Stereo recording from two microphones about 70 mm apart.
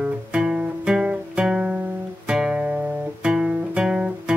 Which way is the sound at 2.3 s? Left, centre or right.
Centre.